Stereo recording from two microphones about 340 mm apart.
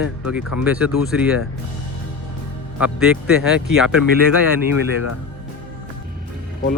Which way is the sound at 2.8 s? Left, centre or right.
Centre.